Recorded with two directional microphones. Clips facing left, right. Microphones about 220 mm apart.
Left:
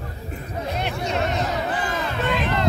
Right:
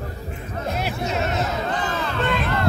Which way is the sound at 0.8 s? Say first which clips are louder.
Left 1 dB; 5° right (ahead or behind).